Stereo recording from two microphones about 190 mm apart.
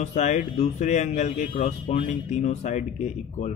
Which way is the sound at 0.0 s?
35° left (ahead or behind).